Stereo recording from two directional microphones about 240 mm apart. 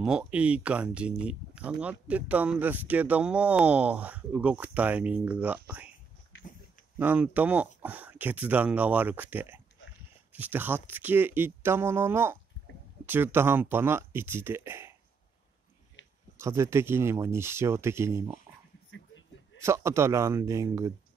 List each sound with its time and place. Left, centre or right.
0.0 s speech: centre
7.0 s speech: centre
16.3 s speech: centre
18.9 s a sound: left
19.6 s speech: centre